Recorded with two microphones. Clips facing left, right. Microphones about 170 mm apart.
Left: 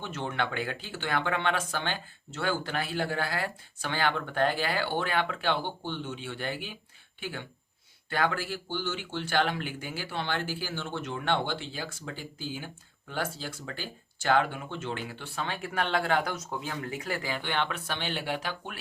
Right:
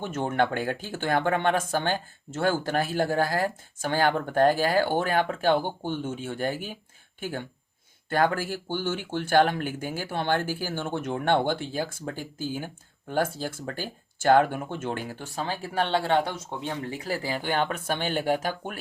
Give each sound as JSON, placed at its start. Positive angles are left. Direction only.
{"t": 0.0, "sound": "speech", "side_deg": -50}